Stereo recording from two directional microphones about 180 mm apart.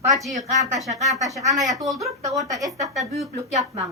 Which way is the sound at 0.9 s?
20° right (ahead or behind).